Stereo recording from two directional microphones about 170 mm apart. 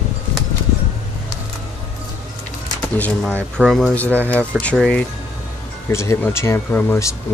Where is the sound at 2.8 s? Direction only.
10° left (ahead or behind).